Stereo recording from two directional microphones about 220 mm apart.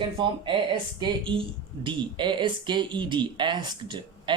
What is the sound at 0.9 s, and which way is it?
Speech, 20° right (ahead or behind).